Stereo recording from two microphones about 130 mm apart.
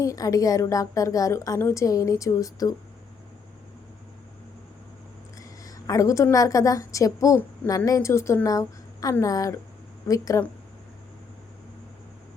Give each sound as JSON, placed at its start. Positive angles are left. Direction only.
{"t": 0.0, "sound": "a woman's voice", "side_deg": 25}
{"t": 5.4, "sound": "a sound", "side_deg": 25}
{"t": 6.3, "sound": "a woman's voice", "side_deg": 25}